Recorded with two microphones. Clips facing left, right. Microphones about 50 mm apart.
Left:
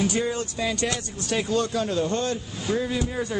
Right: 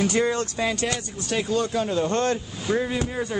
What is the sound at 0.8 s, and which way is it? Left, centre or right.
Speech, centre.